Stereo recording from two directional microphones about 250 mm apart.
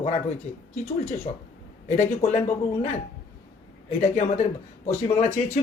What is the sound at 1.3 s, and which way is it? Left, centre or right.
Speech, left.